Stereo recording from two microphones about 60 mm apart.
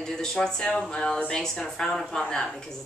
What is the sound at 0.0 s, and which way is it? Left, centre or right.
A woman's voice, centre.